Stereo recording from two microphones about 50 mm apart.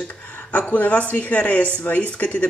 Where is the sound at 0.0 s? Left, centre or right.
Left.